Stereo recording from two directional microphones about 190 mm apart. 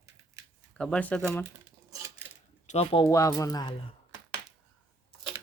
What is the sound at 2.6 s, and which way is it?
Speech, 35° left (ahead or behind).